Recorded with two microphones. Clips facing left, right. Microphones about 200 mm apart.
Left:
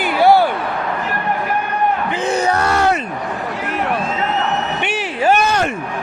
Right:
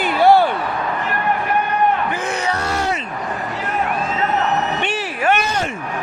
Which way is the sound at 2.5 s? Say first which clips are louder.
Left 5 dB; 65° left (ahead or behind).